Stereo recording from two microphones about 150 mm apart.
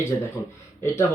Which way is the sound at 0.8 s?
20° left (ahead or behind).